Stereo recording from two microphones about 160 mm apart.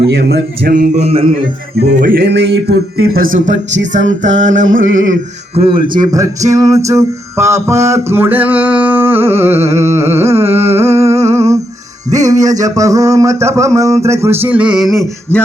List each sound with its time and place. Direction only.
0.0 s a sound: 90° right; by 0.9 s 70° right (ahead or behind)
0.9 s music: 40° right (ahead or behind)
1.8 s a man's voice: 75° right (ahead or behind); by 3.6 s 55° right (ahead or behind)
3.9 s music: 50° right (ahead or behind)
6.0 s music: 20° right (ahead or behind)
12.1 s a sound: 20° right (ahead or behind); by 15.4 s centre (ahead or behind)